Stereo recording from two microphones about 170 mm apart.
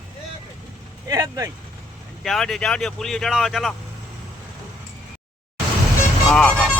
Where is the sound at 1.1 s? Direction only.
20° right (ahead or behind).